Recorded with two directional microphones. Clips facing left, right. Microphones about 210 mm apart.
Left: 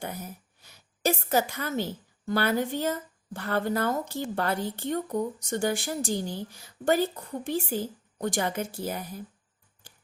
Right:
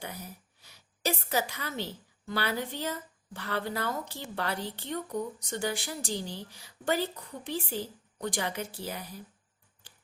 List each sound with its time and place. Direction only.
0.0 s a woman's voice: 50° left (ahead or behind)
9.8 s finger snapping: 45° left (ahead or behind)